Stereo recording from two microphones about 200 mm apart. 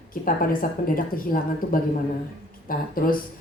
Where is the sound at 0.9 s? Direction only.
45° left (ahead or behind).